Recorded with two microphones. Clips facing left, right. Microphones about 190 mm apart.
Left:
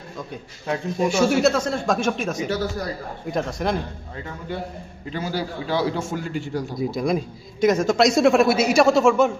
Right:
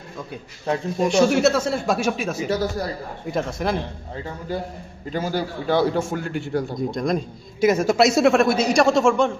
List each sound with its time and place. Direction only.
0.9 s speech: centre (ahead or behind)
2.5 s a man's voice: 40° right (ahead or behind)
3.3 s speech: centre (ahead or behind)
5.1 s a man's voice: 45° right (ahead or behind)
6.7 s speech: 5° left (ahead or behind)
7.6 s speech: 10° right (ahead or behind)